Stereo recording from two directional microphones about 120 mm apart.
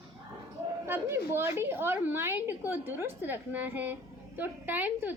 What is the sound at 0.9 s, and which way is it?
A woman's voice, 20° right (ahead or behind).